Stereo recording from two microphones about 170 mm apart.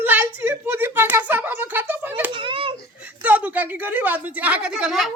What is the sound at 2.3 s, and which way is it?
Children playing, 30° right (ahead or behind).